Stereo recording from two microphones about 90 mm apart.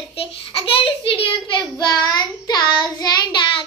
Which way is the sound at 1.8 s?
50° left (ahead or behind).